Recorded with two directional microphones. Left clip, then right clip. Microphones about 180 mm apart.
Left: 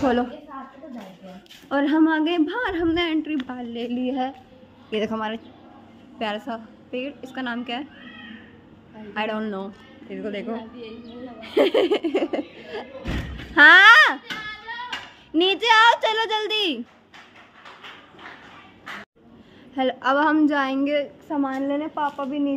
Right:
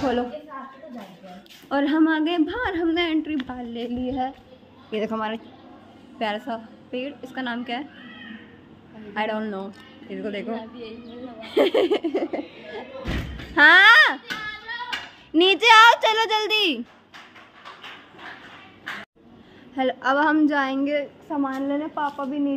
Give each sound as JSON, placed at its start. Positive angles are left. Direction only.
{"t": 0.0, "sound": "a woman's voice", "side_deg": 20}
{"t": 1.7, "sound": "a woman's voice", "side_deg": 10}
{"t": 4.9, "sound": "a woman's voice", "side_deg": 10}
{"t": 9.1, "sound": "a woman's voice", "side_deg": 10}
{"t": 9.7, "sound": "a woman's voice", "side_deg": -5}
{"t": 13.6, "sound": "a woman's voice", "side_deg": 15}
{"t": 14.9, "sound": "a sound", "side_deg": -10}
{"t": 15.9, "sound": "speech", "side_deg": -10}
{"t": 19.7, "sound": "a woman's voice", "side_deg": 10}
{"t": 21.5, "sound": "a woman's voice", "side_deg": 0}